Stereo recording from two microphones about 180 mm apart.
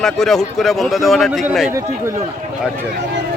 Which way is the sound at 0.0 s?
Centre (ahead or behind).